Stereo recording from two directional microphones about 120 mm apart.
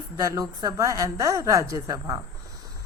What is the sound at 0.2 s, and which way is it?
A woman's voice, 30° right (ahead or behind).